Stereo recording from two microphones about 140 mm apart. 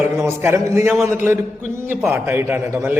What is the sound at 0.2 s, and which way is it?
Speech, 20° right (ahead or behind).